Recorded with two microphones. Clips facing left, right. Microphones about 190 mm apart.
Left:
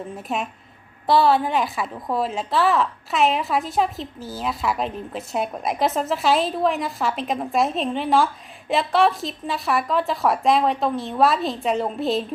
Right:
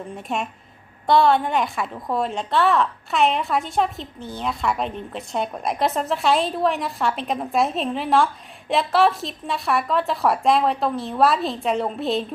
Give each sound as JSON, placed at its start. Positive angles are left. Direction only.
{"t": 0.1, "sound": "a woman's voice", "side_deg": 0}